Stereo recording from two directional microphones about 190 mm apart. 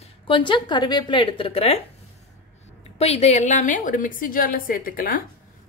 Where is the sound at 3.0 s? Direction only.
35° left (ahead or behind).